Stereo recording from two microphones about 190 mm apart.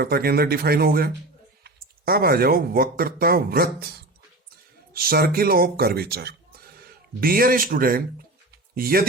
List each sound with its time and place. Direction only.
0.0 s speech: 55° right (ahead or behind)